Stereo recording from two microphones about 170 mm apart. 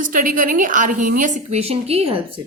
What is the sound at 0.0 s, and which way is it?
A woman's voice, 50° right (ahead or behind).